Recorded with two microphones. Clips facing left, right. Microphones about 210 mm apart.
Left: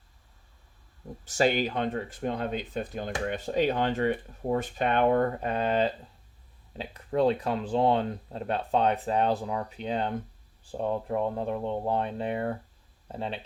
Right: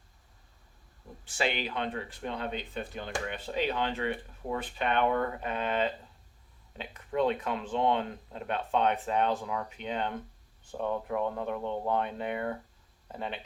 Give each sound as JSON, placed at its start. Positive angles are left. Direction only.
{"t": 1.2, "sound": "speech", "side_deg": 40}